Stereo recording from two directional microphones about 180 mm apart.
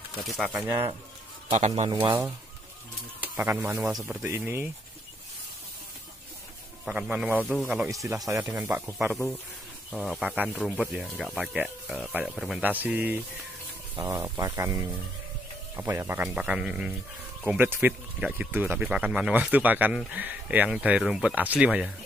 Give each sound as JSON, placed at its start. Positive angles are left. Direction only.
{"t": 0.2, "sound": "speech", "side_deg": 0}
{"t": 0.7, "sound": "speech", "side_deg": -10}
{"t": 1.5, "sound": "a man's voice", "side_deg": -40}
{"t": 3.2, "sound": "speech", "side_deg": -10}
{"t": 6.8, "sound": "speech", "side_deg": -5}
{"t": 7.9, "sound": "speech", "side_deg": -15}
{"t": 8.9, "sound": "speech", "side_deg": 0}